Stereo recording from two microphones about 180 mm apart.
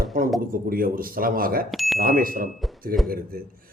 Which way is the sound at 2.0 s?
55° right (ahead or behind).